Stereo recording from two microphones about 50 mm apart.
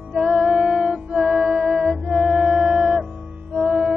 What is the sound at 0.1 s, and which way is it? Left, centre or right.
Music, centre.